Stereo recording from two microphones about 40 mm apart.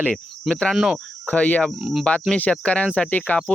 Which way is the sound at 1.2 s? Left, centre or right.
Left.